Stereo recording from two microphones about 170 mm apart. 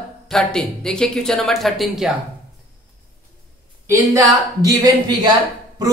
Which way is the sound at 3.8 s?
15° right (ahead or behind).